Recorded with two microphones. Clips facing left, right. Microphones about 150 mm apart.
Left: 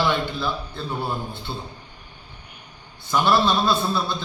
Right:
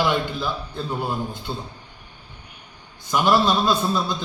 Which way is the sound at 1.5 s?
5° left (ahead or behind).